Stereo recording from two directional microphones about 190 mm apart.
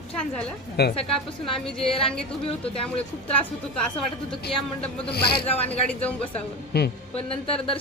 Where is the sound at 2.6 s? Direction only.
30° left (ahead or behind).